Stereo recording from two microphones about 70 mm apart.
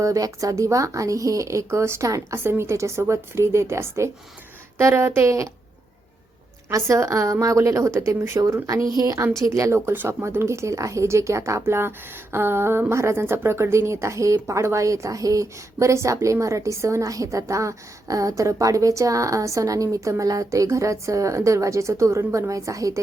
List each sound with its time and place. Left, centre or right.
0.0 s speech: right
2.4 s a woman's voice: right
6.7 s speech: right
9.0 s a woman's voice: right
9.9 s speech: right